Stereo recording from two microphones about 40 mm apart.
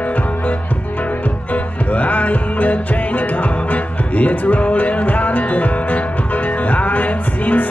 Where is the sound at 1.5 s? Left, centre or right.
Left.